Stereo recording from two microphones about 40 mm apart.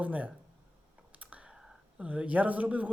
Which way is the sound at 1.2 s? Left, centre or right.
Right.